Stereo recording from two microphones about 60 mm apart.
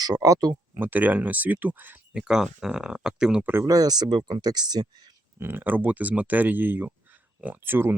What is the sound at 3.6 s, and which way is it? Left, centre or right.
Speech, right.